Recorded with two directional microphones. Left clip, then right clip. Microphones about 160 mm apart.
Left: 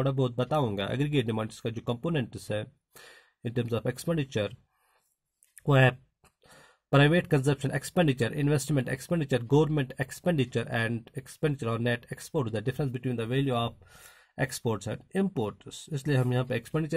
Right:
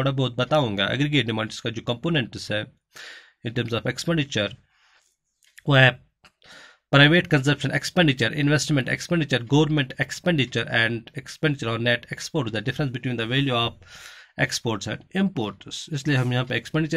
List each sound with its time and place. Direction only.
0.0 s speech: 35° left (ahead or behind)
5.6 s speech: 40° left (ahead or behind)